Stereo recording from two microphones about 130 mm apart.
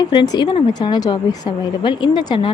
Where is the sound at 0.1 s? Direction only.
35° left (ahead or behind).